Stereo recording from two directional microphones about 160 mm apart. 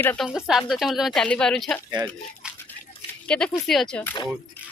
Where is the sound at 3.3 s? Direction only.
5° left (ahead or behind).